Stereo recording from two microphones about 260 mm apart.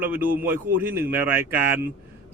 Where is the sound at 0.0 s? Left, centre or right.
Centre.